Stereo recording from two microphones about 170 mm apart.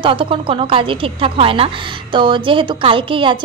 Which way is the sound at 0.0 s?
30° right (ahead or behind).